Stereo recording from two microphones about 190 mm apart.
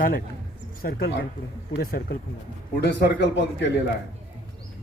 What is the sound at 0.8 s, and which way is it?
Speech, 55° left (ahead or behind).